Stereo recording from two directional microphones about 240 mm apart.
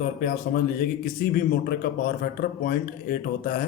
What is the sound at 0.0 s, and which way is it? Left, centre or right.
Speech, left.